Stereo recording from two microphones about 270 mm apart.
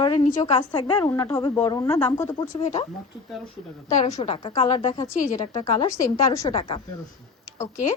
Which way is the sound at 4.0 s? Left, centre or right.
Centre.